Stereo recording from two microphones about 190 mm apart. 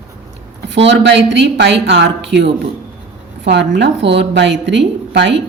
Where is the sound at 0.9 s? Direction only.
65° right (ahead or behind).